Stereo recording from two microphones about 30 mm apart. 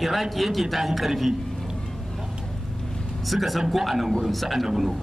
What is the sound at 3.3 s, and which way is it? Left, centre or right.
Speech, centre.